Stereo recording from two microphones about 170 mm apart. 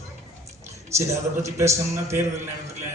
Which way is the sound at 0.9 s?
15° right (ahead or behind).